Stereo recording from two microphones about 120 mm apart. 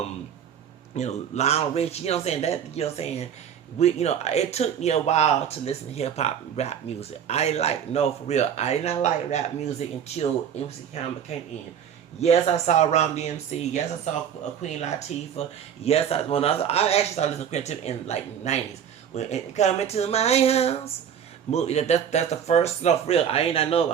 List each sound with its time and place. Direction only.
0.9 s speech: 75° left (ahead or behind); by 23.8 s 55° left (ahead or behind)